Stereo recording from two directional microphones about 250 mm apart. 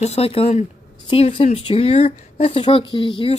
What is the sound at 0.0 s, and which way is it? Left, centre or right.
Speech, left.